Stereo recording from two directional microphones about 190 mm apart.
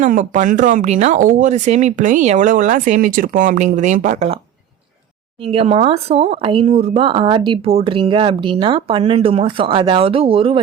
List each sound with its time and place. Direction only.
0.0 s speech: 40° right (ahead or behind)
5.4 s speech: 30° right (ahead or behind)